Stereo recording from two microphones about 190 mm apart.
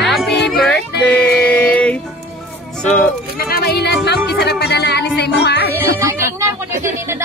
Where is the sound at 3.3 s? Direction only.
50° left (ahead or behind).